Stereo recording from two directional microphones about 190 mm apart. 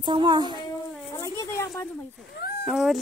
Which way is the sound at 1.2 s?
15° left (ahead or behind).